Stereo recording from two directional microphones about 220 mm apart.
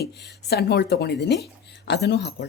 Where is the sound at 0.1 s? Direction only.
50° left (ahead or behind).